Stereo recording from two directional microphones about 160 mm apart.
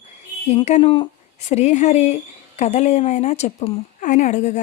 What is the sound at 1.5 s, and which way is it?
Speech, 45° left (ahead or behind).